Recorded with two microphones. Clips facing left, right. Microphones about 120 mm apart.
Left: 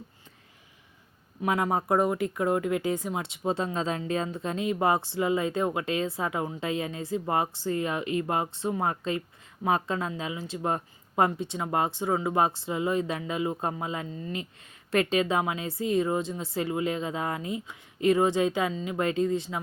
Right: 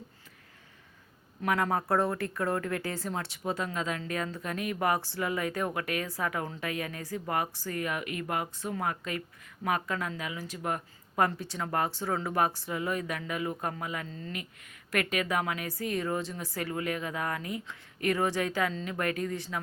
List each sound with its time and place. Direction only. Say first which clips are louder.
1.5 s speech: left 2 dB; 20° left (ahead or behind)
14.8 s speech: left 5 dB; 25° left (ahead or behind)